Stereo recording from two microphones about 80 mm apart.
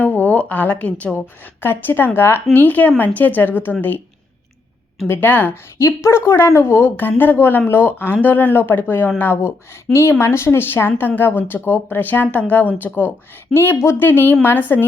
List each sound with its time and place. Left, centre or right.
0.0 s a woman's voice: left
5.0 s speech: left
5.7 s a woman's voice: left